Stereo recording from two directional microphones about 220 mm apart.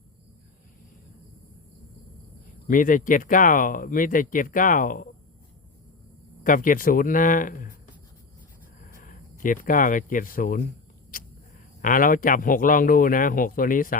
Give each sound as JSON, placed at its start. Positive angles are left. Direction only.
{"t": 2.6, "sound": "speech", "side_deg": 35}
{"t": 6.4, "sound": "speech", "side_deg": 40}
{"t": 8.9, "sound": "a sound", "side_deg": 40}
{"t": 9.4, "sound": "speech", "side_deg": 35}
{"t": 11.8, "sound": "speech", "side_deg": 40}